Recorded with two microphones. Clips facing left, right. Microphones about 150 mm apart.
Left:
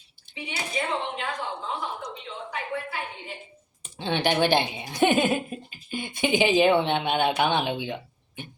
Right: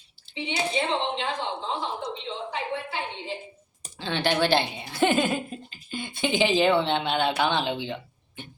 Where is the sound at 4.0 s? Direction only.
15° left (ahead or behind).